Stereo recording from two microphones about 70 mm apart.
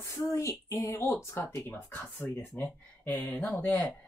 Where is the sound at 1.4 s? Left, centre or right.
Left.